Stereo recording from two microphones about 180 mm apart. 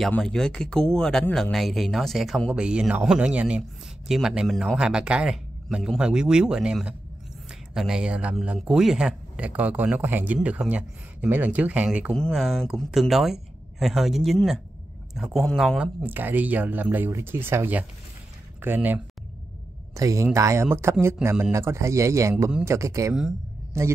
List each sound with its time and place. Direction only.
0.0 s speech: 5° left (ahead or behind); by 22.5 s 15° right (ahead or behind)
22.5 s speech: 5° right (ahead or behind)
22.8 s speech: 15° right (ahead or behind)